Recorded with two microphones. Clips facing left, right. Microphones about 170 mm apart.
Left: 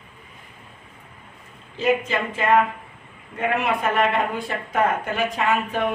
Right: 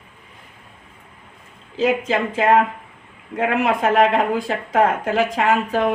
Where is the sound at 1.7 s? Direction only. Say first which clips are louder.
Right 3 dB; 90° right.